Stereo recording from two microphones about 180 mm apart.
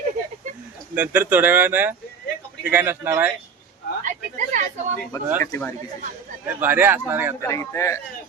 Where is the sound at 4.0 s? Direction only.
45° right (ahead or behind).